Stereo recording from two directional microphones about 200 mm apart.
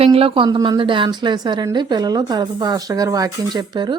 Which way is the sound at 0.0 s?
30° right (ahead or behind).